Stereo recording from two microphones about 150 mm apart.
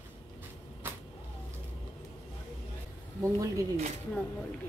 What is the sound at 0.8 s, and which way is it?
Vehicle, 15° right (ahead or behind).